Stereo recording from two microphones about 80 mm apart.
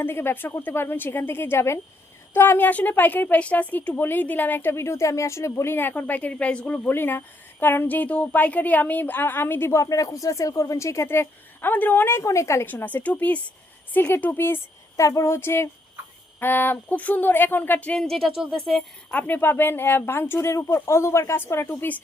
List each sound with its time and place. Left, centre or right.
0.0 s speech: left
12.6 s speech: left
14.9 s a sound: left
16.4 s speech: left; by 18.8 s centre
19.1 s speech: left